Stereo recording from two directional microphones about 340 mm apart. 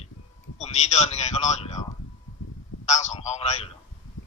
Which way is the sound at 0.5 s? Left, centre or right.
Centre.